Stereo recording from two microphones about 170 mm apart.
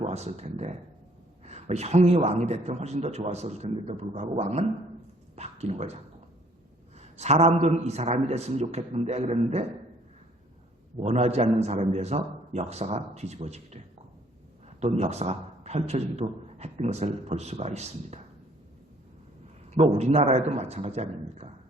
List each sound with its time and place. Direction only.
0.0 s a man's voice: 40° right (ahead or behind)
7.0 s a man's voice: 40° right (ahead or behind)
11.0 s a man's voice: 40° right (ahead or behind)
14.8 s a man's voice: 40° right (ahead or behind)
19.7 s a man's voice: 40° right (ahead or behind)